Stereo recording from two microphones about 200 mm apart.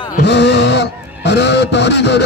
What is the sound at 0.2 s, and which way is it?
Speech, 60° left (ahead or behind).